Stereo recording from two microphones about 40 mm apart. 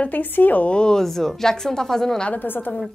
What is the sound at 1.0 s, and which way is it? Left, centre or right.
Speech, centre.